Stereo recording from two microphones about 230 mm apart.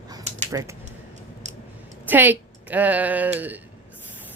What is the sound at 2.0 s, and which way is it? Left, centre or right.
Speech, centre.